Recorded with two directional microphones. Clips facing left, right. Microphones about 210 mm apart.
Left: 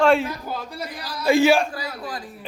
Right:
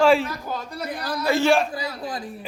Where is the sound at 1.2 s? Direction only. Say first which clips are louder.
Left 4 dB; 15° left (ahead or behind).